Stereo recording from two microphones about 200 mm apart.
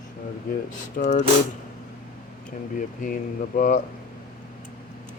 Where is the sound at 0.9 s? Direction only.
40° left (ahead or behind).